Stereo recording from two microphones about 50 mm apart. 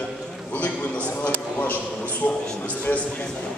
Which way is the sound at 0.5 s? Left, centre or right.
Left.